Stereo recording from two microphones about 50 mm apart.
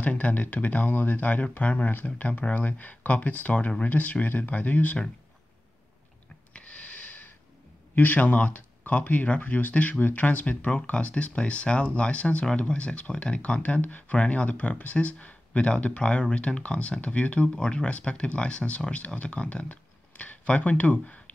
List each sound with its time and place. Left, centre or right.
0.0 s speech: left
6.5 s a sound: left
7.9 s speech: left